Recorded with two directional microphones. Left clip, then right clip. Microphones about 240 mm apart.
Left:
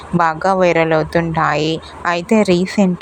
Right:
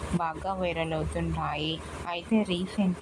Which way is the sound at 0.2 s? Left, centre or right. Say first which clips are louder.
Left 18 dB; left.